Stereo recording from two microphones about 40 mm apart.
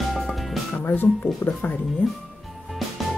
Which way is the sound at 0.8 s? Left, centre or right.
Left.